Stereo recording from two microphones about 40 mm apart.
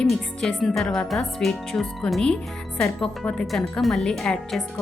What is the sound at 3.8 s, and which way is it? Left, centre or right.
Speech, centre.